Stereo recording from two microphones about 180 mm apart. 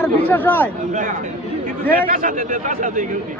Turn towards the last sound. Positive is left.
turn(degrees=-45)  # may be behind; listen again after turning